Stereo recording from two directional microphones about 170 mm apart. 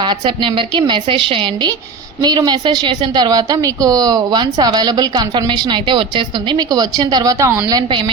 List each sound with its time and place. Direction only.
0.0 s a woman's voice: 30° right (ahead or behind)